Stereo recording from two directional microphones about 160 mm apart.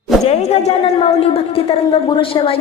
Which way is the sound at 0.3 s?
40° left (ahead or behind).